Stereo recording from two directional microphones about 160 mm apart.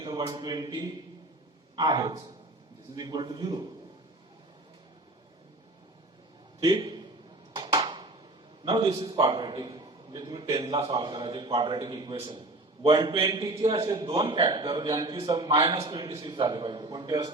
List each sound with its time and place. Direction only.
0.0 s a man's voice: 25° right (ahead or behind)
6.6 s a man's voice: 25° right (ahead or behind)
7.5 s a sound: 25° right (ahead or behind)
8.6 s a man's voice: 30° right (ahead or behind)